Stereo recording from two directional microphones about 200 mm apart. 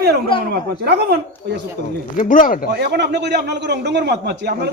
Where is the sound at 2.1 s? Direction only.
40° left (ahead or behind).